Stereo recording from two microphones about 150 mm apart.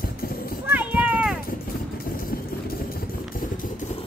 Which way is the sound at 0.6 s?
10° right (ahead or behind).